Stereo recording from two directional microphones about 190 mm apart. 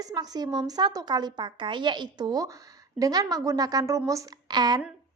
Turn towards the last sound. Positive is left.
turn(degrees=-20)  # may be behind; listen again after turning